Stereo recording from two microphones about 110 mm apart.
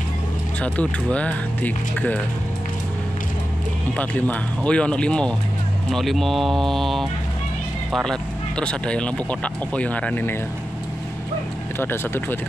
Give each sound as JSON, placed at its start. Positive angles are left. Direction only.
{"t": 0.6, "sound": "speech", "side_deg": 10}
{"t": 3.9, "sound": "speech", "side_deg": 15}
{"t": 11.8, "sound": "speech", "side_deg": 20}